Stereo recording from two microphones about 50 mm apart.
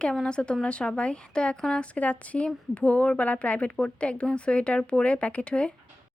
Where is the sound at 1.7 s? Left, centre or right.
Left.